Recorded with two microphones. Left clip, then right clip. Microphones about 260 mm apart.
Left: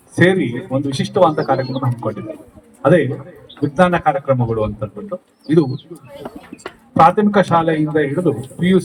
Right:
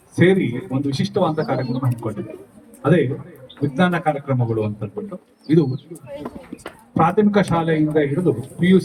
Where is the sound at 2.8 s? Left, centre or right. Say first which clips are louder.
Left 5 dB; centre.